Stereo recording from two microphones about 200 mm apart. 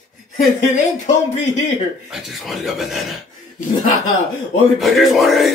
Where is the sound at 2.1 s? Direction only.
Centre (ahead or behind).